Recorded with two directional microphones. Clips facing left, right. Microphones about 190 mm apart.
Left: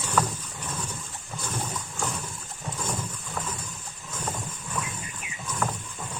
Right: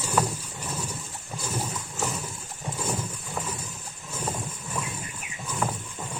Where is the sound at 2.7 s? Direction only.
10° right (ahead or behind).